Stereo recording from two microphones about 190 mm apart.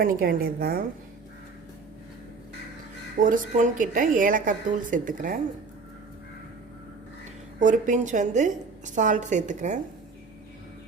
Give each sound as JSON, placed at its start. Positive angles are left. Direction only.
{"t": 0.0, "sound": "a woman's voice", "side_deg": -50}
{"t": 3.2, "sound": "a woman's voice", "side_deg": -45}
{"t": 7.6, "sound": "a woman's voice", "side_deg": -40}